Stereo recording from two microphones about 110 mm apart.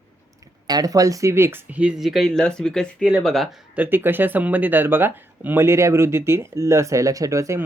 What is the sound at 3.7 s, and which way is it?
Speech, 15° right (ahead or behind).